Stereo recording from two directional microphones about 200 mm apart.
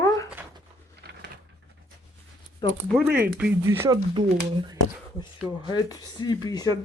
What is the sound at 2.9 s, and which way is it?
Speech, 10° right (ahead or behind).